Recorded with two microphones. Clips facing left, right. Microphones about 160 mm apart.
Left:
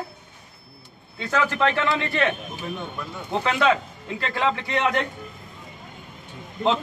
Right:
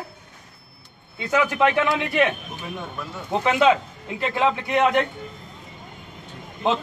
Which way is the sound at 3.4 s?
15° right (ahead or behind).